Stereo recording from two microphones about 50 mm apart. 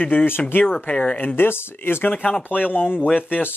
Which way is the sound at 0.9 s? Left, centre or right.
Centre.